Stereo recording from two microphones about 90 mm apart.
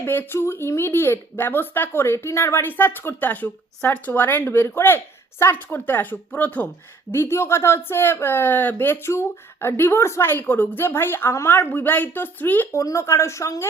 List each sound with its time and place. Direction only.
0.0 s speech: 25° left (ahead or behind)
12.7 s speech: 35° left (ahead or behind)